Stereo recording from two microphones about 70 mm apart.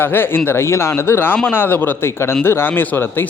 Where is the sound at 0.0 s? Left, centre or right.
Left.